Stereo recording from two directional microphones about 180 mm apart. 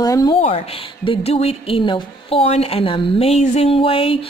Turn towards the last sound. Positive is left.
turn(degrees=30)  # may be behind; listen again after turning